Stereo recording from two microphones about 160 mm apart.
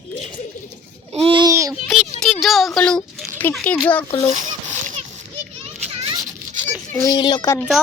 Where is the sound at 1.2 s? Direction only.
30° right (ahead or behind).